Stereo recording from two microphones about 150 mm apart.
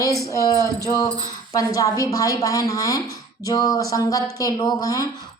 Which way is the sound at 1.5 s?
20° left (ahead or behind).